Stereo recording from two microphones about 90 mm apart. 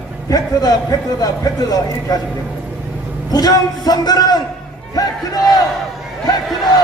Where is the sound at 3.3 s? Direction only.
45° left (ahead or behind).